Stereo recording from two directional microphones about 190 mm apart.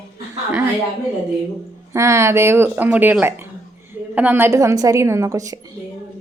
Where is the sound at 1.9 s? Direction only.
15° right (ahead or behind).